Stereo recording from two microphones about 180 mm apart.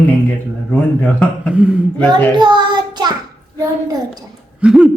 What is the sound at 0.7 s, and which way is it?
Speech, 5° left (ahead or behind).